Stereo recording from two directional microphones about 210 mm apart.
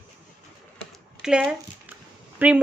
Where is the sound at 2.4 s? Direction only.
10° right (ahead or behind).